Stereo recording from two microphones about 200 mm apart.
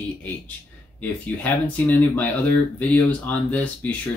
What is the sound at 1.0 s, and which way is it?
Speech, 5° left (ahead or behind).